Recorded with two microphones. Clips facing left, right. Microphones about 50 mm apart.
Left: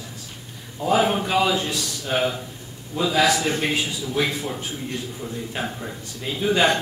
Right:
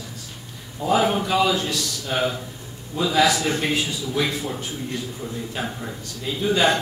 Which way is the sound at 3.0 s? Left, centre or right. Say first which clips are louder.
Even; centre.